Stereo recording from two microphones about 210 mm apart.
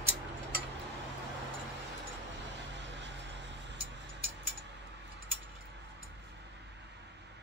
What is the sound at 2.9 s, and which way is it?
Vehicle, 55° right (ahead or behind).